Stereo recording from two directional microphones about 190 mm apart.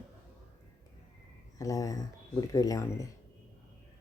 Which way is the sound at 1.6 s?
20° left (ahead or behind).